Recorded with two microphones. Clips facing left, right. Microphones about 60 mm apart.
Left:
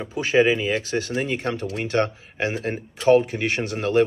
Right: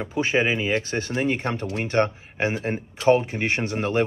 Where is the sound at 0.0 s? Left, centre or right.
Right.